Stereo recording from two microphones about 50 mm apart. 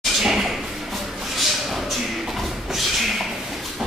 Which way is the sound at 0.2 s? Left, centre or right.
Centre.